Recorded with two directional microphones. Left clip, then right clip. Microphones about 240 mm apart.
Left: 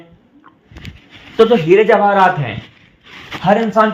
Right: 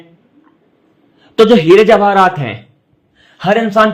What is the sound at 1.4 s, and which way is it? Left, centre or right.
A man's voice, right.